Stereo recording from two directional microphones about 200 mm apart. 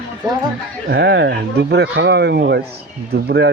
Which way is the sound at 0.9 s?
60° right (ahead or behind).